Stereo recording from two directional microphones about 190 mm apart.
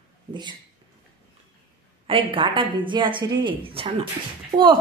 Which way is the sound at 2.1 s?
25° right (ahead or behind).